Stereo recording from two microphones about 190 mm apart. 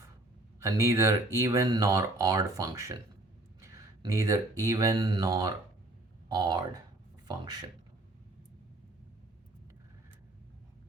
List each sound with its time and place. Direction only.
0.6 s speech: 15° right (ahead or behind)